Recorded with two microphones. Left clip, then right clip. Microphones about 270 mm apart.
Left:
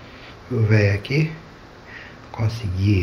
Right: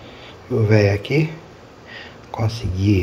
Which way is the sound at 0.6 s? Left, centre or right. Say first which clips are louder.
Right 4 dB; centre.